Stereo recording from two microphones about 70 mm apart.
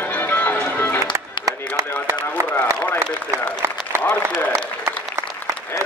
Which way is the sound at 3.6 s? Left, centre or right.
Right.